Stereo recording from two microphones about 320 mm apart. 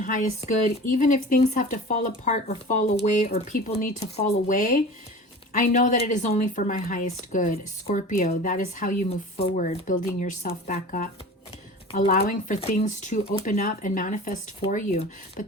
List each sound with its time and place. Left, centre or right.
0.0 s speech: left